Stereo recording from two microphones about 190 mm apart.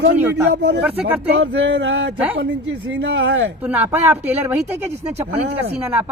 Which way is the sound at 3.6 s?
10° right (ahead or behind).